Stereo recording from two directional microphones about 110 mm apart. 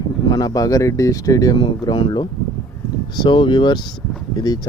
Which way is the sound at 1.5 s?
45° left (ahead or behind).